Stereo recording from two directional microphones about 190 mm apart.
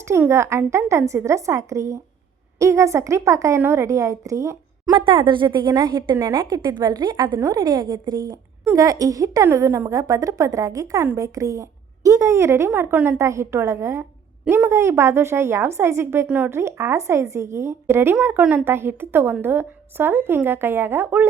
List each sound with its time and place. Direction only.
0.0 s a woman's voice: 15° right (ahead or behind)